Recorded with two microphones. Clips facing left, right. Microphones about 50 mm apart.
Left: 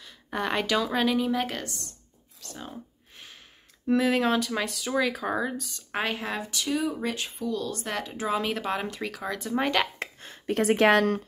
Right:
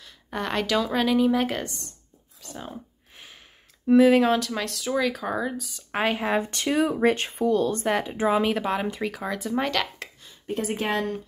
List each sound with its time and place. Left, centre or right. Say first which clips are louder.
0.0 s speech: even; centre
2.4 s a sound: right 3 dB; centre
3.8 s speech: right 6 dB; centre
6.5 s speech: right 5 dB; right
7.8 s speech: right 7 dB; centre
8.5 s speech: right 4 dB; centre
10.2 s speech: left 4 dB; left